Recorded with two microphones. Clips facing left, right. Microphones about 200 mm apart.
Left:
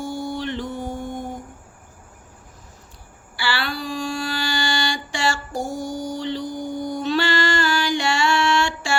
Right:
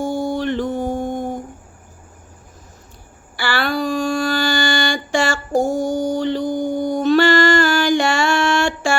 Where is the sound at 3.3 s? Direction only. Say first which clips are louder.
Right 5 dB; 45° right (ahead or behind).